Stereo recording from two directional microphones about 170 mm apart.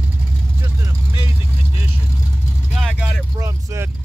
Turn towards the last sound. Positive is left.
turn(degrees=-15)  # may be behind; listen again after turning